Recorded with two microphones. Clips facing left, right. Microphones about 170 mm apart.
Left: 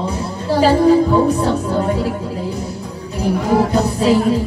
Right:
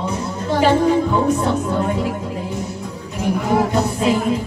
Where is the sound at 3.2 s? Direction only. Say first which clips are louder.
Left 2 dB; 35° left (ahead or behind).